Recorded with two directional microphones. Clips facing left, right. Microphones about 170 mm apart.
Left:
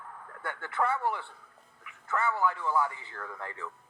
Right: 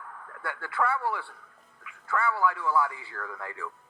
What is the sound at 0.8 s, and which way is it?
A man's voice, 20° left (ahead or behind).